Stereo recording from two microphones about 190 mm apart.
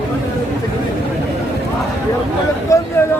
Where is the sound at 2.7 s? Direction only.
15° left (ahead or behind).